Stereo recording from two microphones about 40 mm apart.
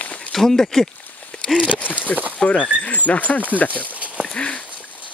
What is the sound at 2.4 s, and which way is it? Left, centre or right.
Speech, left.